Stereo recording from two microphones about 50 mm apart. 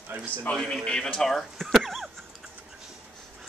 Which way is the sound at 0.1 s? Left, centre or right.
Right.